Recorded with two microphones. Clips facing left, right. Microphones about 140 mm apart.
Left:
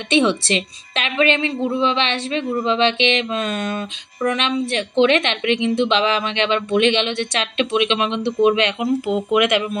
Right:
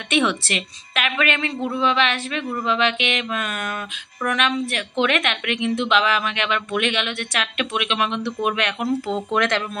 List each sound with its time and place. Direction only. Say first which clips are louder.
0.1 s a woman's voice: left 4 dB; 25° left (ahead or behind)